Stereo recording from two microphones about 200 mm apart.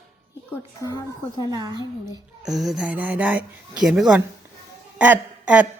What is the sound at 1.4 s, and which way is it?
Speech, 20° right (ahead or behind).